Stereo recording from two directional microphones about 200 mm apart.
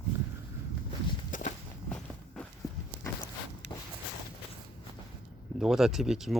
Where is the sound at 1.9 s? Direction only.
5° left (ahead or behind).